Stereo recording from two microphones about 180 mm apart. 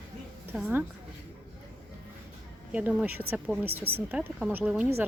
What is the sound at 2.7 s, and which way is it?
A woman's voice, 10° right (ahead or behind).